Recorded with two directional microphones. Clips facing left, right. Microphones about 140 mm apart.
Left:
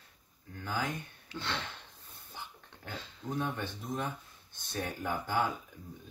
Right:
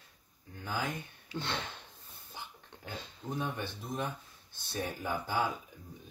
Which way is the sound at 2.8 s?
15° right (ahead or behind).